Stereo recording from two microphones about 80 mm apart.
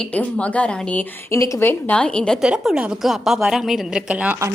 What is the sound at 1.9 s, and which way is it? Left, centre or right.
Speech, centre.